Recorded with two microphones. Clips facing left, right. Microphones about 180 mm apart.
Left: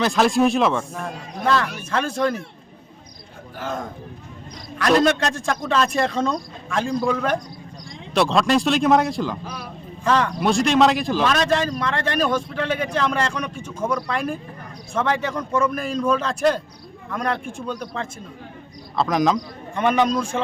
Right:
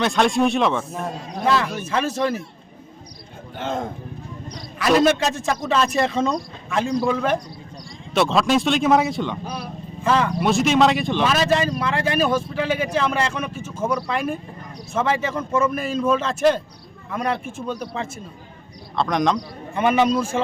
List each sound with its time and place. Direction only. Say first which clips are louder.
0.0 s speech: left 1 dB; centre (ahead or behind)
3.6 s speech: right 3 dB; 25° right (ahead or behind)
4.8 s speech: right 1 dB; centre (ahead or behind)